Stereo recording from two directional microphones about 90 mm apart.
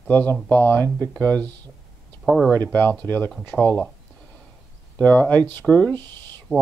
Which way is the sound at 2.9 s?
15° left (ahead or behind).